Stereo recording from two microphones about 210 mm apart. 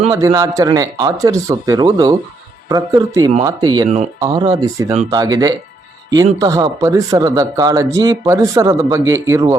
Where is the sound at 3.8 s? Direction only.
35° right (ahead or behind).